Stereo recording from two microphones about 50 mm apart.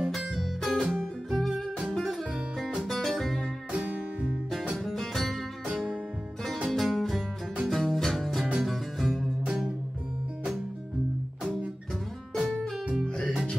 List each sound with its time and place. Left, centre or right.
0.1 s music: centre
2.8 s music: centre
3.7 s music: right
4.7 s music: centre
6.7 s music: centre
12.4 s guitar: centre
13.0 s music: centre